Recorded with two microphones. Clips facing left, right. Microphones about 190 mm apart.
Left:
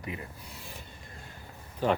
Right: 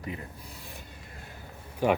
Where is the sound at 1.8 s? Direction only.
15° right (ahead or behind).